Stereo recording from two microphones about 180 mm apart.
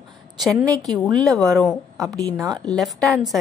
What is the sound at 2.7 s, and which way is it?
Speech, centre (ahead or behind).